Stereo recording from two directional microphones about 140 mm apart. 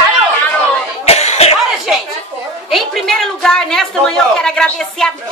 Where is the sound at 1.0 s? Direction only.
50° left (ahead or behind).